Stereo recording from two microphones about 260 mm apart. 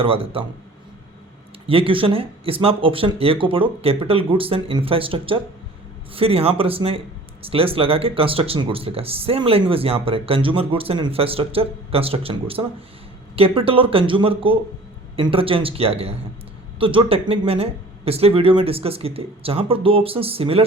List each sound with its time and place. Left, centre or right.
0.0 s speech: right
1.6 s speech: right